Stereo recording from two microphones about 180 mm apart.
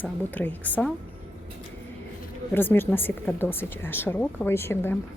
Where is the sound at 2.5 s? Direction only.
10° left (ahead or behind).